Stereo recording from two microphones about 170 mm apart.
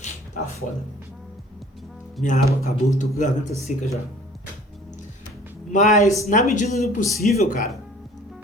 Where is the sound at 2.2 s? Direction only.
45° left (ahead or behind).